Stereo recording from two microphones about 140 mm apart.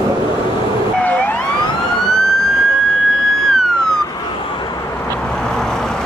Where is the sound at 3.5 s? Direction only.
5° left (ahead or behind).